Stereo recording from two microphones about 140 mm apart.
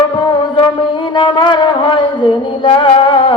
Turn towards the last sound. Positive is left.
turn(degrees=40)  # may be behind; listen again after turning